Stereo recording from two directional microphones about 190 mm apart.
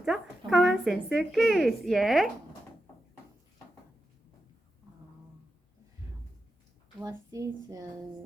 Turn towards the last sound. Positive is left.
turn(degrees=-20)  # may be behind; listen again after turning